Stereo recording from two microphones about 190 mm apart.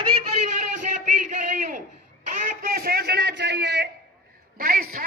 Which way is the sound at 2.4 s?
50° right (ahead or behind).